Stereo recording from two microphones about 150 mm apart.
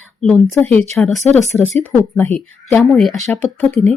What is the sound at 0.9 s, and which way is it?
Speech, centre (ahead or behind).